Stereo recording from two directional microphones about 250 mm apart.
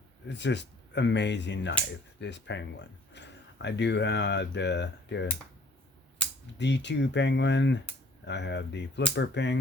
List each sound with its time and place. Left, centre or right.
0.3 s speech: left
6.6 s speech: left